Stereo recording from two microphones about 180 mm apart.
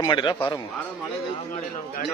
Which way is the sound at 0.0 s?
25° left (ahead or behind).